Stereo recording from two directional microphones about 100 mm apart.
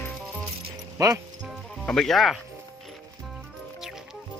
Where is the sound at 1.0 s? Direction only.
35° right (ahead or behind).